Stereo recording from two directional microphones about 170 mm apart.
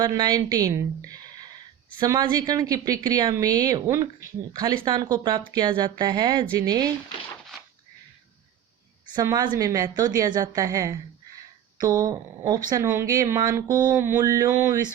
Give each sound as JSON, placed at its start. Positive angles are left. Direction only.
{"t": 0.0, "sound": "a woman's voice", "side_deg": -25}
{"t": 9.1, "sound": "a woman's voice", "side_deg": -25}
{"t": 13.9, "sound": "mantra", "side_deg": -10}
{"t": 14.2, "sound": "a woman's voice", "side_deg": -20}